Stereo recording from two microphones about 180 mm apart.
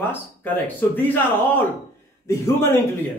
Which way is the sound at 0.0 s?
10° left (ahead or behind).